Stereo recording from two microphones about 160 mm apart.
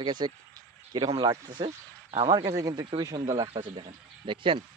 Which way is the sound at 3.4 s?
35° right (ahead or behind).